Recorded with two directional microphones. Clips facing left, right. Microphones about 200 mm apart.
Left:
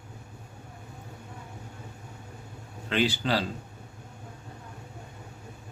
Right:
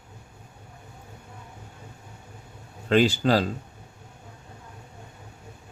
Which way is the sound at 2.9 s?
45° right (ahead or behind).